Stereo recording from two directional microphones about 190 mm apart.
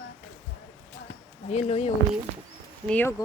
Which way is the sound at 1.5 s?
35° left (ahead or behind).